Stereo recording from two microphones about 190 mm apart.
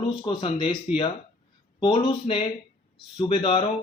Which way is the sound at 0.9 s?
5° right (ahead or behind).